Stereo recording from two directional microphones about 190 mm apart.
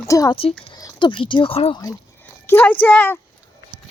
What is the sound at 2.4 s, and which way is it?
Speech, 10° left (ahead or behind).